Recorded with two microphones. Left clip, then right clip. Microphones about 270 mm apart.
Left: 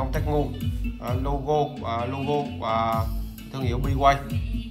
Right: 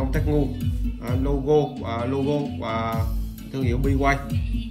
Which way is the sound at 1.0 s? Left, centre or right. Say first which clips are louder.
Right 3 dB; centre.